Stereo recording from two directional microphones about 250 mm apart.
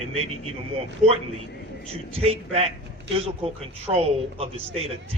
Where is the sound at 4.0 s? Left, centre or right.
Right.